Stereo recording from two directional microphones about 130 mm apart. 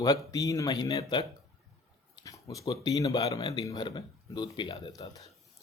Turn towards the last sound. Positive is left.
turn(degrees=30)  # may be behind; listen again after turning